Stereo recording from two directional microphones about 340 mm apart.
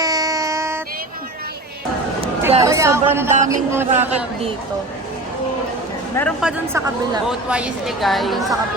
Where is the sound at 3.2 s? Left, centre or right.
Right.